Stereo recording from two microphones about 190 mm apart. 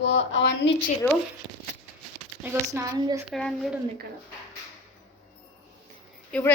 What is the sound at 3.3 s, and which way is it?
Speech, centre (ahead or behind).